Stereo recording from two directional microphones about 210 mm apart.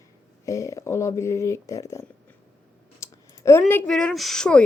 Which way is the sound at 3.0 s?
15° left (ahead or behind).